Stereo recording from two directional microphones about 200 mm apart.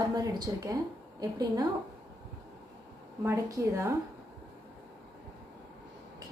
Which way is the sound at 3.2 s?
15° right (ahead or behind).